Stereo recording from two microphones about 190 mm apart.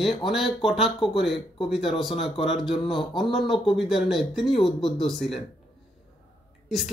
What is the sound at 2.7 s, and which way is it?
Speech, 25° left (ahead or behind).